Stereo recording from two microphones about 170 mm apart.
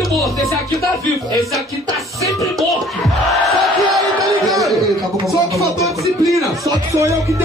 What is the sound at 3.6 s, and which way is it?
Speech, centre (ahead or behind).